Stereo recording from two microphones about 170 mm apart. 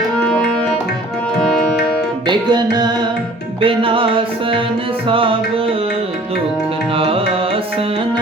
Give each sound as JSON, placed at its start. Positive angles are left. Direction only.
{"t": 0.2, "sound": "tabla", "side_deg": 5}
{"t": 2.2, "sound": "music", "side_deg": -25}
{"t": 6.9, "sound": "music", "side_deg": -30}